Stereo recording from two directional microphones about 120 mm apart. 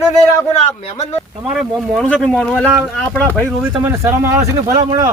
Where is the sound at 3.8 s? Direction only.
20° right (ahead or behind).